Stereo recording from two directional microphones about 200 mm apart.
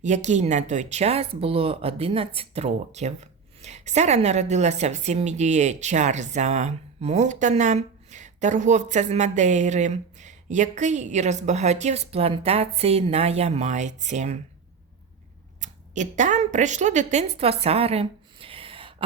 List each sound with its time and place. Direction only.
0.0 s speech: 35° right (ahead or behind)
15.6 s a woman's voice: 35° right (ahead or behind)